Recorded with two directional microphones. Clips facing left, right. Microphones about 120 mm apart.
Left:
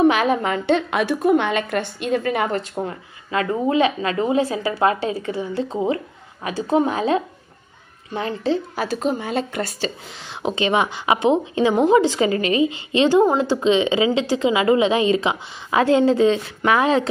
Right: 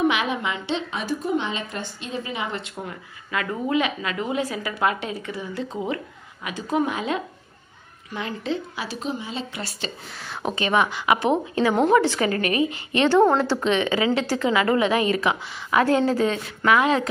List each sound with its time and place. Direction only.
0.0 s a woman's voice: 40° left (ahead or behind)
2.7 s a woman's voice: 30° left (ahead or behind)
8.8 s a woman's voice: 45° left (ahead or behind)
10.2 s a woman's voice: 25° left (ahead or behind)